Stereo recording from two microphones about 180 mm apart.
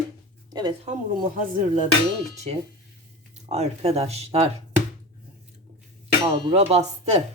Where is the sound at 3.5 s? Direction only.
35° right (ahead or behind).